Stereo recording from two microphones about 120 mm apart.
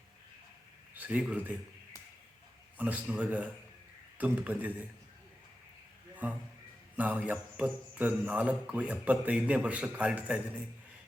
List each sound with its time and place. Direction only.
0.9 s speech: 10° right (ahead or behind)
2.7 s speech: 10° right (ahead or behind)
6.9 s speech: 10° right (ahead or behind)